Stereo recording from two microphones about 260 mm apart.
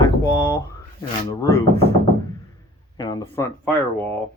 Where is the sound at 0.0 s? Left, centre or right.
Centre.